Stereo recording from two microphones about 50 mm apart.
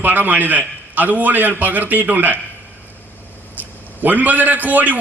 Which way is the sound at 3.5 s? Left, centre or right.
Right.